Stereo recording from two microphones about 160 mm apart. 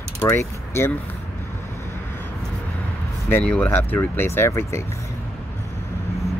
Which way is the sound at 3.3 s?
10° left (ahead or behind).